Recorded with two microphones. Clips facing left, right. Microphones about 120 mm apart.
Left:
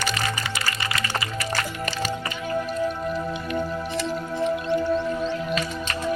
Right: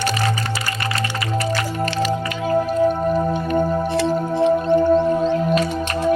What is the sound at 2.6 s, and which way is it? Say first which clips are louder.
Music: right 9 dB; 45° right (ahead or behind).